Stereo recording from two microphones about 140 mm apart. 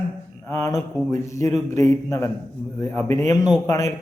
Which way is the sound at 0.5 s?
25° left (ahead or behind).